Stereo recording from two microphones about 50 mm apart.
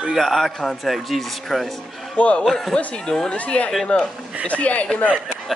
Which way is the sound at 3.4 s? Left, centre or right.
Left.